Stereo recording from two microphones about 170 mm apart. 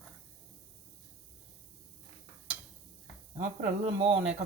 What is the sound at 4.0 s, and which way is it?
Speech, 35° right (ahead or behind).